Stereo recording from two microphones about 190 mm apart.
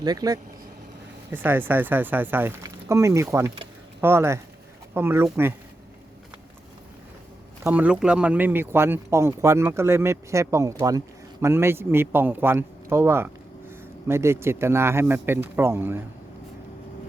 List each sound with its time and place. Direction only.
0.0 s speech: 20° right (ahead or behind)
1.3 s speech: 10° right (ahead or behind)
7.6 s speech: 10° right (ahead or behind)